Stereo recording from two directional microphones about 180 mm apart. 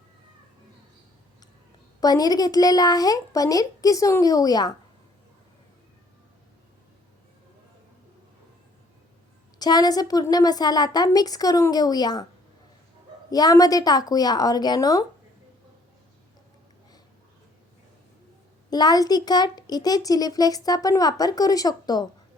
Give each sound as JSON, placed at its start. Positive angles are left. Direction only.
{"t": 2.0, "sound": "a child's voice", "side_deg": 20}
{"t": 9.6, "sound": "a child's voice", "side_deg": 20}
{"t": 13.3, "sound": "a child's voice", "side_deg": 20}
{"t": 18.7, "sound": "a child's voice", "side_deg": 20}